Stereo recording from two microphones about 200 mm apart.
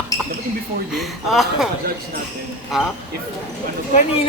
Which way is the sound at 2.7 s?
Centre (ahead or behind).